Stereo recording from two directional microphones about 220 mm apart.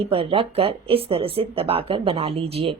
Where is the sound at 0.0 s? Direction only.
25° right (ahead or behind).